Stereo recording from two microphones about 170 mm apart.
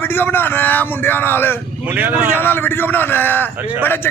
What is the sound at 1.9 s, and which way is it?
Speech, 10° right (ahead or behind).